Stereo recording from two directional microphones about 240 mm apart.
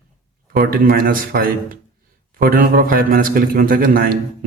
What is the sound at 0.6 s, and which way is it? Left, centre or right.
A man's voice, right.